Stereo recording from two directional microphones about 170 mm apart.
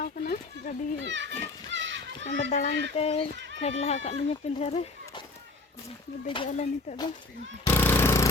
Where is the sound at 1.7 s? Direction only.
90° right.